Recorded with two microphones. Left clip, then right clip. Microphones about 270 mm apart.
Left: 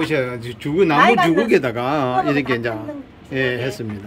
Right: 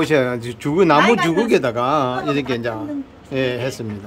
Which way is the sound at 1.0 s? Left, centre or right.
Left.